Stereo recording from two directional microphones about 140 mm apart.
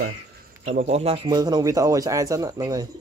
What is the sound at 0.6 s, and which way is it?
Speech, 55° right (ahead or behind).